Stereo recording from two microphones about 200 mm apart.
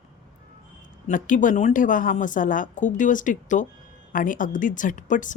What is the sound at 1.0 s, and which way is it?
Speech, 40° left (ahead or behind).